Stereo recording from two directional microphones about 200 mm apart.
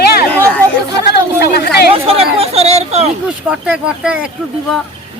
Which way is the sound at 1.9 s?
30° right (ahead or behind).